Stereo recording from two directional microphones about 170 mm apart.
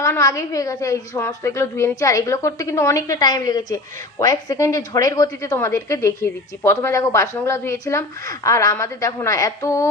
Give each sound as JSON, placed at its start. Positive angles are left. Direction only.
{"t": 0.0, "sound": "a woman's voice", "side_deg": 20}